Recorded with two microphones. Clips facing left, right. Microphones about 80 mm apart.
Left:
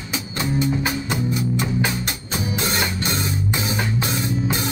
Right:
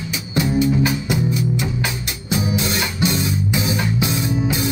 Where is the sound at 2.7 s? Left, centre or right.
Left.